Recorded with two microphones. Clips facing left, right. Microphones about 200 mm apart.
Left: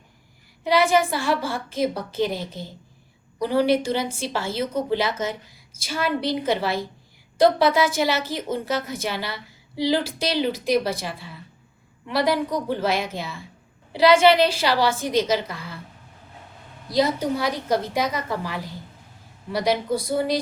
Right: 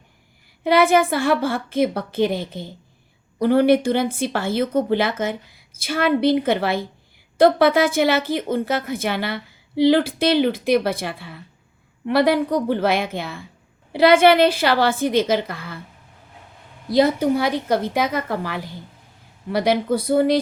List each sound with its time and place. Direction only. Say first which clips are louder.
0.6 s a woman's voice: right 3 dB; 55° right (ahead or behind)
16.9 s a woman's voice: right 5 dB; 55° right (ahead or behind)